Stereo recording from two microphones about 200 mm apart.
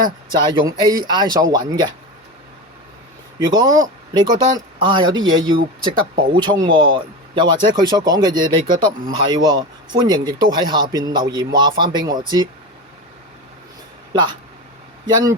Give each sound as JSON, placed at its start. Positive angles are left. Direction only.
{"t": 0.0, "sound": "speech", "side_deg": -25}
{"t": 3.3, "sound": "speech", "side_deg": -20}
{"t": 5.2, "sound": "speech", "side_deg": -75}
{"t": 5.8, "sound": "speech", "side_deg": -25}
{"t": 14.1, "sound": "speech", "side_deg": -20}